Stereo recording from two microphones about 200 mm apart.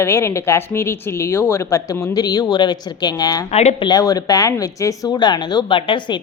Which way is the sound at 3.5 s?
30° left (ahead or behind).